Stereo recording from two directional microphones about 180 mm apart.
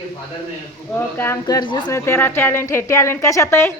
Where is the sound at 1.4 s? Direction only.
25° left (ahead or behind).